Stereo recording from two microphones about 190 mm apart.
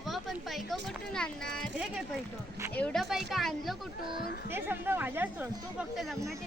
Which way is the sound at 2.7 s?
10° left (ahead or behind).